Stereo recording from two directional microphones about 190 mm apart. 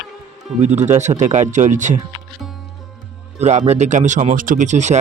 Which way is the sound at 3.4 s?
35° right (ahead or behind).